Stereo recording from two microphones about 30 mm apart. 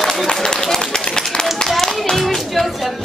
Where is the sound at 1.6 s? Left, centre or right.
Centre.